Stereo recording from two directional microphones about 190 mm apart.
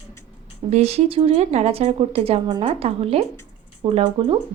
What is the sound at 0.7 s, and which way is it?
A woman's voice, 35° right (ahead or behind).